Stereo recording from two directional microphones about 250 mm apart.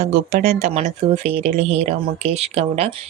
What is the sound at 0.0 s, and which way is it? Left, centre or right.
Speech, right.